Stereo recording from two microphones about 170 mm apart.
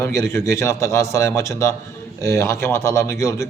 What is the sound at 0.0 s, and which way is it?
A man's voice, 15° left (ahead or behind).